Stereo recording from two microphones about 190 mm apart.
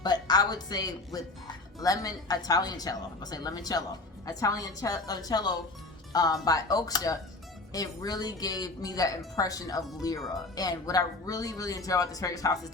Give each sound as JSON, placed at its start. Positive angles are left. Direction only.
{"t": 0.0, "sound": "speech", "side_deg": 20}